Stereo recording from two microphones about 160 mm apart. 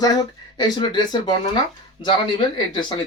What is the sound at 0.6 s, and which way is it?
Speech, 30° left (ahead or behind).